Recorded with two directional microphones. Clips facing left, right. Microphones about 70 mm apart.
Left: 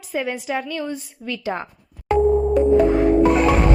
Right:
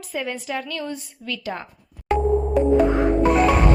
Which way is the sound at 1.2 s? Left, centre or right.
Left.